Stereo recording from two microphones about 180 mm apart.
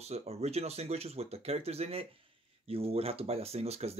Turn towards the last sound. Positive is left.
turn(degrees=-35)  # may be behind; listen again after turning